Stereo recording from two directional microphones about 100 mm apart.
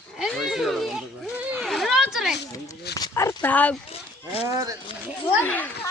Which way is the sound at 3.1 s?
30° left (ahead or behind).